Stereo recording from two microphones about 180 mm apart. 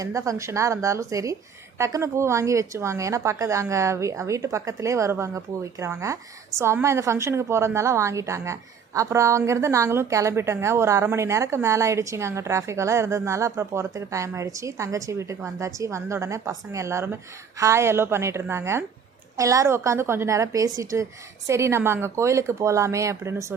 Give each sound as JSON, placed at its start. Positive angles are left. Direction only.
{"t": 0.0, "sound": "a woman's voice", "side_deg": -15}